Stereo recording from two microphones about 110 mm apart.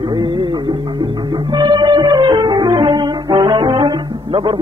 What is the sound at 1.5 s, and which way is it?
Music, 40° right (ahead or behind).